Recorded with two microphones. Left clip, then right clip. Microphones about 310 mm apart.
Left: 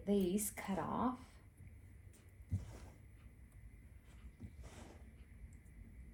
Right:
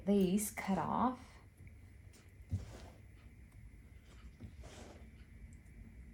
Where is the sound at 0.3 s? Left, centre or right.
Right.